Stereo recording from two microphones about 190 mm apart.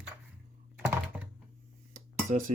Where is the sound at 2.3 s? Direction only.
45° right (ahead or behind).